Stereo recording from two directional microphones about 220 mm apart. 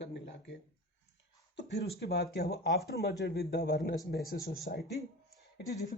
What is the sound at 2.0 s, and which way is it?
Speech, 45° left (ahead or behind).